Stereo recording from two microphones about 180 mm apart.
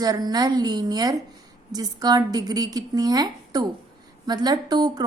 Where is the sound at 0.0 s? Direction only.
20° right (ahead or behind).